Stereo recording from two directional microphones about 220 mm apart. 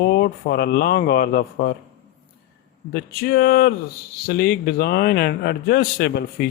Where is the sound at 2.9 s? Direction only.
45° left (ahead or behind).